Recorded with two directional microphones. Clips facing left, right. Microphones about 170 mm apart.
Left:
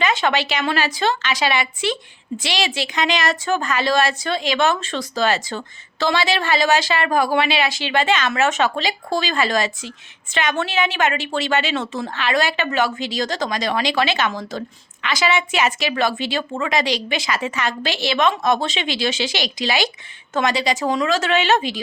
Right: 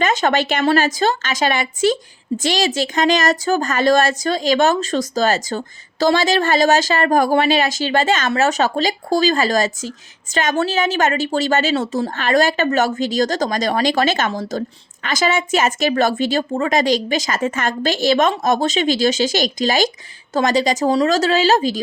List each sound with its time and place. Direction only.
0.0 s a woman's voice: 45° right (ahead or behind)